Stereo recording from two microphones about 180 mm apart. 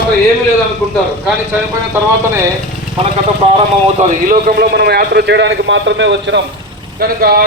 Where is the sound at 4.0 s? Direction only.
45° right (ahead or behind); by 6.4 s 80° right.